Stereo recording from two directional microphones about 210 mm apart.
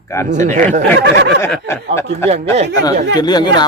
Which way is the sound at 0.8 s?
60° right (ahead or behind).